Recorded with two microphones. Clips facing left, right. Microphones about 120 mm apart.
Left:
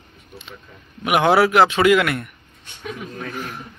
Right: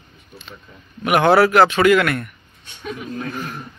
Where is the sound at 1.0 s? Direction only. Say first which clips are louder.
Right 2 dB; 10° left (ahead or behind).